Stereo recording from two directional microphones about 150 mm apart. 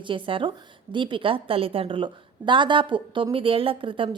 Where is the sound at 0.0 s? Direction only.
35° right (ahead or behind).